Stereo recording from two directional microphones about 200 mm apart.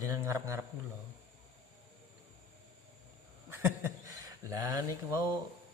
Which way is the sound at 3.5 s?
10° right (ahead or behind).